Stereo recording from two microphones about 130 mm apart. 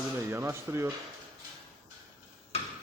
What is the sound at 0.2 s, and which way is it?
Speech, 20° right (ahead or behind).